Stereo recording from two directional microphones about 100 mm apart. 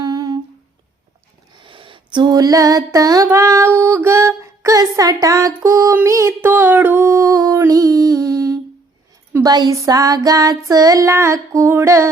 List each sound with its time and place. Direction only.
0.0 s humming: 45° right (ahead or behind)
1.5 s female singing: 55° right (ahead or behind); by 7.6 s 35° right (ahead or behind)
7.7 s child singing: 35° right (ahead or behind)